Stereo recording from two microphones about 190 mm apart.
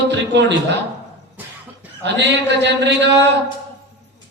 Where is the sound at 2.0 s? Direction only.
65° right (ahead or behind).